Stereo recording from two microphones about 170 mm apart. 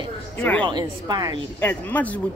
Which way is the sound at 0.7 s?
25° right (ahead or behind).